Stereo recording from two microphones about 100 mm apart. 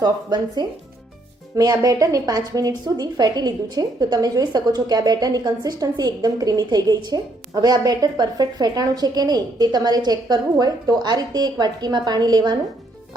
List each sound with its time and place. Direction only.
0.0 s a woman's voice: 45° right (ahead or behind)